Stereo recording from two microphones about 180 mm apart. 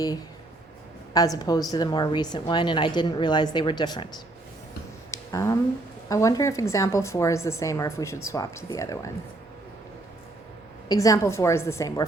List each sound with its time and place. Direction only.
1.1 s a woman's voice: 20° left (ahead or behind)
5.1 s a sound: 20° left (ahead or behind)
6.1 s a woman's voice: 20° left (ahead or behind)
10.8 s a woman's voice: 20° left (ahead or behind)